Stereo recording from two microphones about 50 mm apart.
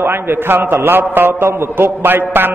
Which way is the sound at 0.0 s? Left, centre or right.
Right.